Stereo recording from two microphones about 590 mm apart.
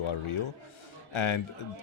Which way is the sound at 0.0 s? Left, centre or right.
Left.